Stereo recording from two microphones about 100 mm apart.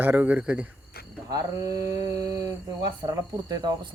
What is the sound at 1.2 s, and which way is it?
Speech, 40° right (ahead or behind).